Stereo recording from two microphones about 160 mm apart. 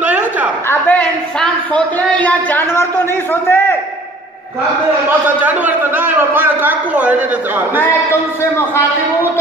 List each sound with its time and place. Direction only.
0.0 s a sound: 10° right (ahead or behind)
0.7 s a man's voice: 10° left (ahead or behind)
5.2 s a man's voice: 10° right (ahead or behind)
7.8 s a man's voice: 15° left (ahead or behind)